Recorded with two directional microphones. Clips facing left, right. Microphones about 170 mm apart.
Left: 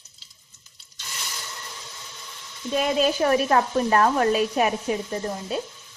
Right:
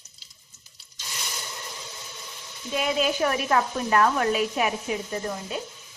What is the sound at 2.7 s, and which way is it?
Speech, 40° left (ahead or behind).